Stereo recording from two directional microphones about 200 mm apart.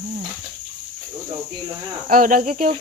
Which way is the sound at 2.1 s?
45° right (ahead or behind).